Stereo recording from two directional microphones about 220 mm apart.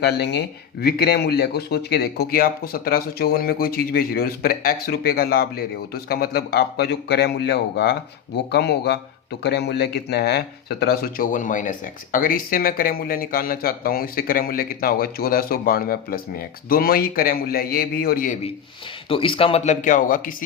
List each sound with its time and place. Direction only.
0.0 s speech: 50° left (ahead or behind)
19.0 s speech: 25° left (ahead or behind)